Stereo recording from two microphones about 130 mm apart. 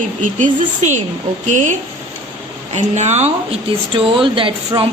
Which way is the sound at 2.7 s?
60° right (ahead or behind).